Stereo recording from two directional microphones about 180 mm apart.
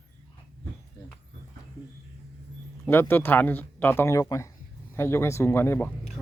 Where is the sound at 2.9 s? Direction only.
10° left (ahead or behind).